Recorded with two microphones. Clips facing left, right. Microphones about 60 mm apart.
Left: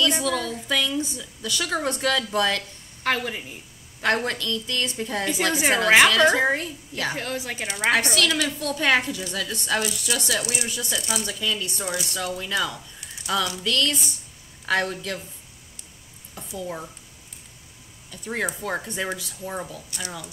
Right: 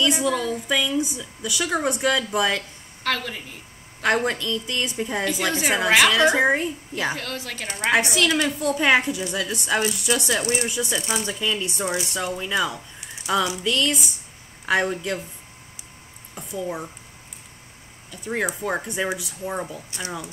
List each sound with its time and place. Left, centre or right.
0.0 s speech: centre
3.0 s a woman's voice: centre
4.0 s speech: centre
7.2 s a woman's voice: centre
7.9 s speech: centre
9.8 s speech: right
10.4 s speech: right
10.7 s speech: right
16.3 s speech: centre
18.1 s speech: centre
19.9 s speech: right